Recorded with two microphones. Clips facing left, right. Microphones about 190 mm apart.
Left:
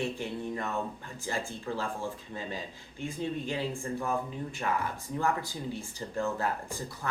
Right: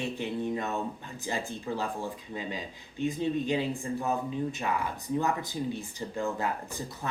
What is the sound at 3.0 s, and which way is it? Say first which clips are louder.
Speech: right 5 dB; 20° right (ahead or behind).